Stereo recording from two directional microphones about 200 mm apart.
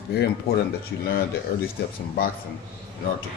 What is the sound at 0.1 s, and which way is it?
Speech, 55° left (ahead or behind).